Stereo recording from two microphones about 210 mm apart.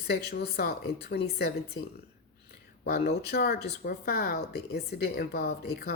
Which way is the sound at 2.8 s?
50° left (ahead or behind).